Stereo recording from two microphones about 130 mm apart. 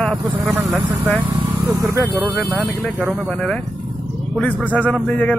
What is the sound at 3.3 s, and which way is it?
Speech, 5° left (ahead or behind).